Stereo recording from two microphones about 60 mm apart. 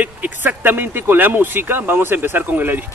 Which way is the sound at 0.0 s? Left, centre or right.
Right.